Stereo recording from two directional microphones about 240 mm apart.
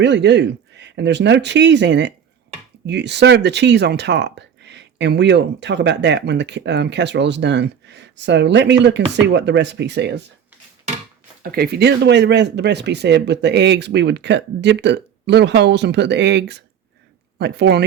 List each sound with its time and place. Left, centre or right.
0.0 s speech: right
11.5 s speech: right